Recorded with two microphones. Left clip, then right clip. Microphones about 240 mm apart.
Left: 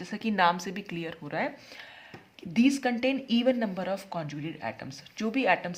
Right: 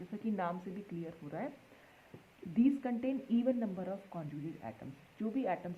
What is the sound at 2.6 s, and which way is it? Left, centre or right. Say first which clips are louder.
Speech: left 8 dB; centre.